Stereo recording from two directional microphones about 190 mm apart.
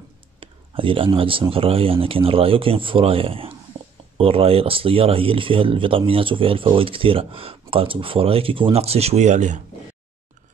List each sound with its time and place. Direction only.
0.4 s speech: 30° right (ahead or behind)